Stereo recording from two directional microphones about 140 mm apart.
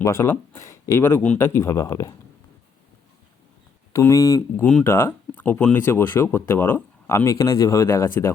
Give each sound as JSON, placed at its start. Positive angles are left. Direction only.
{"t": 0.0, "sound": "speech", "side_deg": 20}
{"t": 3.9, "sound": "speech", "side_deg": 20}
{"t": 4.6, "sound": "speech", "side_deg": 10}